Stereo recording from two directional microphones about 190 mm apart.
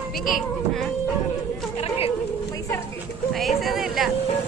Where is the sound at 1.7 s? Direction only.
30° left (ahead or behind).